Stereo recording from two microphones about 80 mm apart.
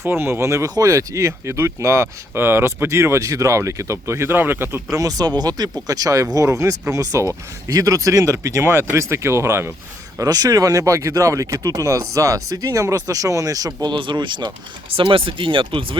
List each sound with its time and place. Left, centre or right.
0.0 s speech: right
4.9 s speech: right
10.2 s speech: right
13.8 s speech: right
15.0 s speech: right